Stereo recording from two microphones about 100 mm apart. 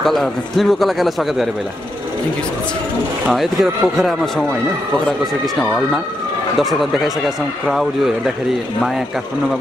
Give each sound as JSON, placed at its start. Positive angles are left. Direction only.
{"t": 0.0, "sound": "a man's voice", "side_deg": 0}
{"t": 3.3, "sound": "a man's voice", "side_deg": -5}